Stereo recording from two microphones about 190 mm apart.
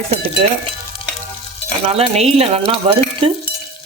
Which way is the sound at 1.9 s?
30° right (ahead or behind).